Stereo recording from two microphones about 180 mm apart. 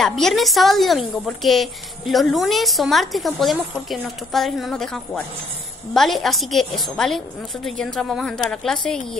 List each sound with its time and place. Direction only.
0.0 s a woman's voice: centre (ahead or behind)